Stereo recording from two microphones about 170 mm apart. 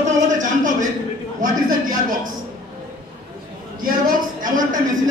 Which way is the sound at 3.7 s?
55° right (ahead or behind).